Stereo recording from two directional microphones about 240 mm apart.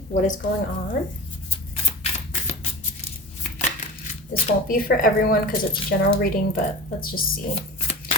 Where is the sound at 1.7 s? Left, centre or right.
Left.